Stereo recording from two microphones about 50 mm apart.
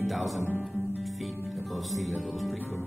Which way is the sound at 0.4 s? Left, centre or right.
Left.